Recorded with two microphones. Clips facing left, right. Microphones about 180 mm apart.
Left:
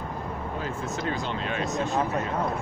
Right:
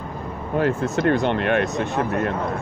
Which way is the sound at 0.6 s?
70° right (ahead or behind).